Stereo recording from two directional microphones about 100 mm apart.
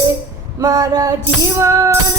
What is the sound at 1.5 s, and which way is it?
Music, 30° right (ahead or behind).